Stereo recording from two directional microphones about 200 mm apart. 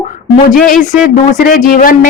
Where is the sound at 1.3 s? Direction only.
40° left (ahead or behind).